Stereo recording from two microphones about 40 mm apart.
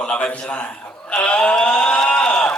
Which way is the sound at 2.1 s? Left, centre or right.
Left.